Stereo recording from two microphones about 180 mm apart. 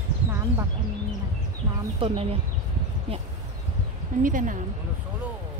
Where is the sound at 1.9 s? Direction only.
30° right (ahead or behind).